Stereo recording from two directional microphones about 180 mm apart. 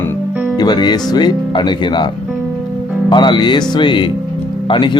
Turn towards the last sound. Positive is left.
turn(degrees=25)  # may be behind; listen again after turning